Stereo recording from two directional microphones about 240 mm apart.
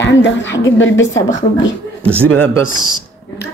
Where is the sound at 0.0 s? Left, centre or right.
Left.